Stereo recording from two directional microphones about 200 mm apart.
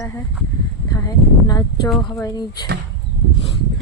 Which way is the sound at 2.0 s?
15° left (ahead or behind).